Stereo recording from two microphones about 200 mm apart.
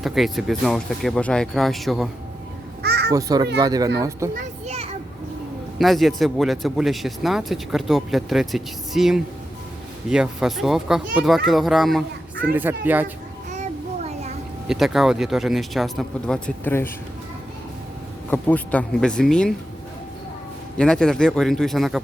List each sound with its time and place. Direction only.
0.0 s speech: centre (ahead or behind)
2.8 s crow: 55° right (ahead or behind)
3.1 s a child's voice: 15° right (ahead or behind)
4.4 s children playing: 35° right (ahead or behind)
5.8 s a child's voice: centre (ahead or behind)
13.5 s a sound: 35° right (ahead or behind)
14.7 s speech: centre (ahead or behind)
18.3 s speech: 10° left (ahead or behind)
20.7 s speech: 5° left (ahead or behind)